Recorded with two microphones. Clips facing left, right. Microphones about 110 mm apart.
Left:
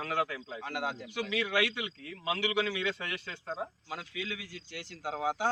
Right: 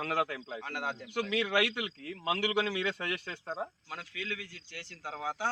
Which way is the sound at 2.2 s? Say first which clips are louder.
Even; 40° right (ahead or behind).